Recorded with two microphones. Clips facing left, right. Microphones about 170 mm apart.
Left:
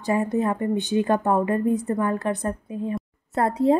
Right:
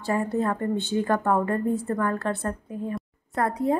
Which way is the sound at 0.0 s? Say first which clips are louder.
Left 2 dB; 15° left (ahead or behind).